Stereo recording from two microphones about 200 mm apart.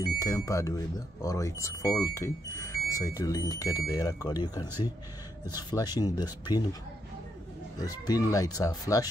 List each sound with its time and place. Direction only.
0.0 s speech: 15° left (ahead or behind)
7.8 s speech: 20° left (ahead or behind)